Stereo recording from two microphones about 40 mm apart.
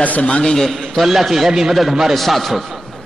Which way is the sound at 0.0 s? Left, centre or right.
Left.